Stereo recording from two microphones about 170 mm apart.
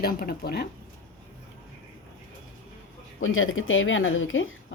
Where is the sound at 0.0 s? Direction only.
65° left (ahead or behind).